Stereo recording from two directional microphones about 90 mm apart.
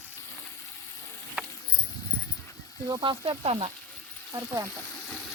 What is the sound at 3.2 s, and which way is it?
Speech, 85° right.